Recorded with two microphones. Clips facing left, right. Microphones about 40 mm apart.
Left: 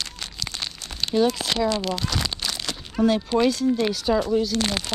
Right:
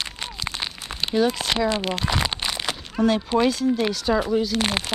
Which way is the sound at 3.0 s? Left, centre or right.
Centre.